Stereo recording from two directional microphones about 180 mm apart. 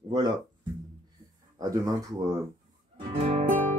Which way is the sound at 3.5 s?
45° right (ahead or behind).